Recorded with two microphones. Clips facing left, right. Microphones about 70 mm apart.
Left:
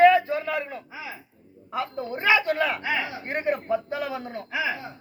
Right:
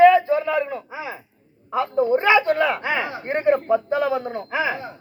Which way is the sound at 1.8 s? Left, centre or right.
Centre.